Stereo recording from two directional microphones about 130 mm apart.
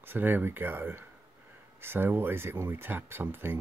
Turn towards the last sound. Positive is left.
turn(degrees=-15)  # may be behind; listen again after turning